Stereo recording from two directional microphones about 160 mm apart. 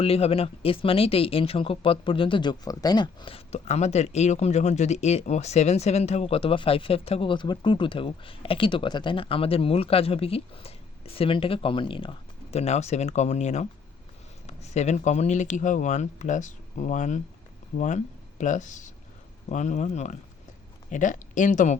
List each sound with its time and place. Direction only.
0.0 s speech: 40° left (ahead or behind)